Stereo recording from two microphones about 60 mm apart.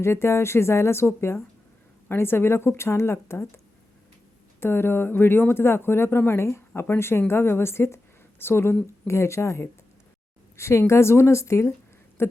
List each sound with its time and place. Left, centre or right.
0.0 s speech: left
4.6 s speech: left
12.2 s speech: left